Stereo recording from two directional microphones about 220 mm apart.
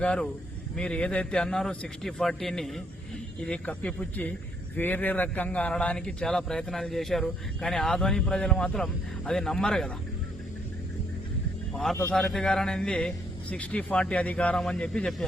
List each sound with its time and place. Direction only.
0.0 s a man's voice: 5° left (ahead or behind)
11.7 s a man's voice: centre (ahead or behind)